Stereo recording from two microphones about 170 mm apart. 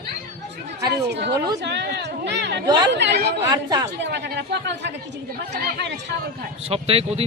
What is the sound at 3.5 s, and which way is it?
Speech, 25° right (ahead or behind).